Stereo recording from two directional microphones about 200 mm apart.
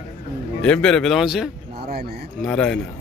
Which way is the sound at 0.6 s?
5° left (ahead or behind).